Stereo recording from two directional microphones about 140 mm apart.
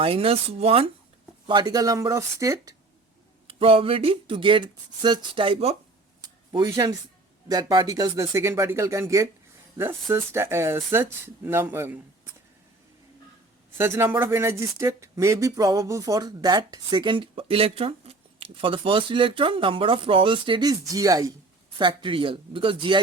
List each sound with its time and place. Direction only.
0.0 s speech: 40° right (ahead or behind)
1.5 s speech: 30° right (ahead or behind)
3.4 s speech: 40° right (ahead or behind)
6.2 s a sound: 30° right (ahead or behind)
7.4 s speech: 30° right (ahead or behind)
13.7 s speech: 20° right (ahead or behind)
21.8 s speech: 35° right (ahead or behind)